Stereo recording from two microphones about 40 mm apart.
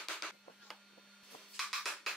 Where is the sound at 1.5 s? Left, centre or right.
Centre.